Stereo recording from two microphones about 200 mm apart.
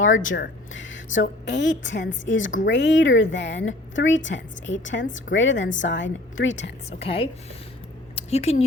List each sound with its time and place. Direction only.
0.3 s a woman's voice: 65° left (ahead or behind)
7.0 s speech: 30° left (ahead or behind)
8.1 s a sound: 30° left (ahead or behind)